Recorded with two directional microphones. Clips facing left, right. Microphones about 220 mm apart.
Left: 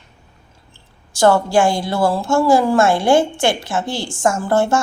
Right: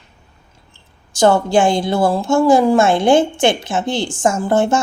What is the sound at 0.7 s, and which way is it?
A woman's voice, 20° right (ahead or behind).